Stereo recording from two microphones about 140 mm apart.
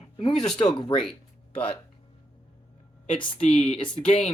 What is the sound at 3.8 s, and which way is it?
Speech, 35° left (ahead or behind).